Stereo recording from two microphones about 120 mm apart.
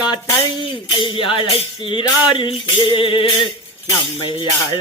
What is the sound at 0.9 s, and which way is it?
Music, 45° left (ahead or behind).